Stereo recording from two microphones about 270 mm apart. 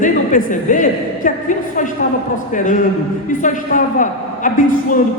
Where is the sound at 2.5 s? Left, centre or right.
Left.